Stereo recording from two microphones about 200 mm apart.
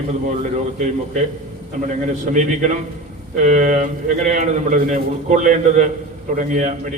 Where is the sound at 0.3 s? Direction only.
35° right (ahead or behind).